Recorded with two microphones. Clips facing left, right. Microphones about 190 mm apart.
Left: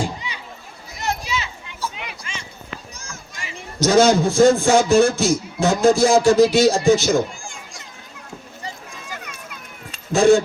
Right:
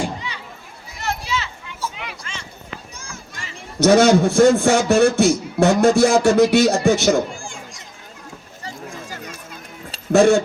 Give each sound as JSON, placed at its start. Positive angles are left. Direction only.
{"t": 1.0, "sound": "a sound", "side_deg": 15}
{"t": 3.8, "sound": "a man's voice", "side_deg": -65}
{"t": 10.1, "sound": "speech", "side_deg": -65}